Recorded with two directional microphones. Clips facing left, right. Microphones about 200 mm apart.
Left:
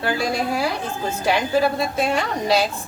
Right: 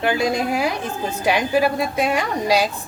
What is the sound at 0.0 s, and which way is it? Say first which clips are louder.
A woman's voice: right 3 dB; 20° right (ahead or behind).